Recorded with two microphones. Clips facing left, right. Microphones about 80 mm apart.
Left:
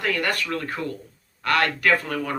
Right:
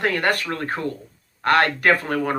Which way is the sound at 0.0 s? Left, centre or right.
Right.